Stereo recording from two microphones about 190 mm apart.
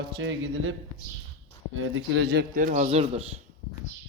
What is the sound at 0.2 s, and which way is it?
Speech, 80° right.